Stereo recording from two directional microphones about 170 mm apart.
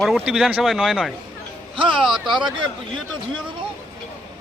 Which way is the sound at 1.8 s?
30° right (ahead or behind).